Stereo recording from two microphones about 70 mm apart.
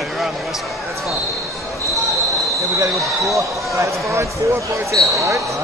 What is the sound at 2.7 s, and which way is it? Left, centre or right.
Speech, right.